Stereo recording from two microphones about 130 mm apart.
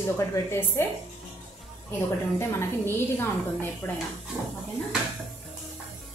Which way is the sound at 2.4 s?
20° left (ahead or behind).